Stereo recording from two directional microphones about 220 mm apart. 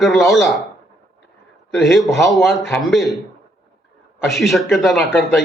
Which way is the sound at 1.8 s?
Centre (ahead or behind).